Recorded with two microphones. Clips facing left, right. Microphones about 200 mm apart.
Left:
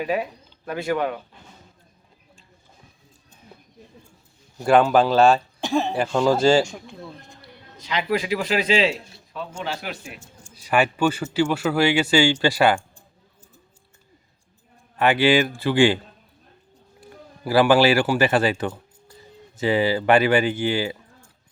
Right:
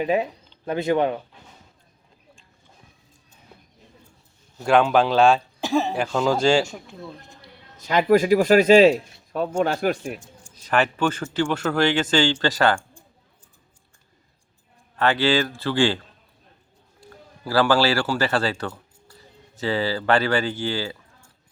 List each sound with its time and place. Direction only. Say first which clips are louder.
0.0 s speech: right 3 dB; 25° right (ahead or behind)
4.5 s speech: left 1 dB; 5° left (ahead or behind)
7.8 s speech: right 7 dB; 45° right (ahead or behind)
10.5 s speech: left 1 dB; 10° left (ahead or behind)
14.9 s speech: left 2 dB; 15° left (ahead or behind)
17.0 s speech: left 3 dB; 15° left (ahead or behind)